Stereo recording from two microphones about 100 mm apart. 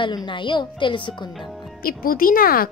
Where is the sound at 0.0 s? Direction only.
50° left (ahead or behind).